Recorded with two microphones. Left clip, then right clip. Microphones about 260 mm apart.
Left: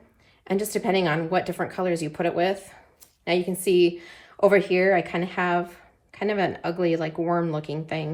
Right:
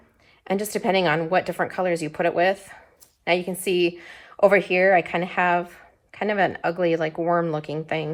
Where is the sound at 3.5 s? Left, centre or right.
Right.